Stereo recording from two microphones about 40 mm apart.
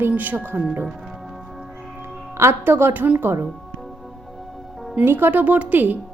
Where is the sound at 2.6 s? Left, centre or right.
Right.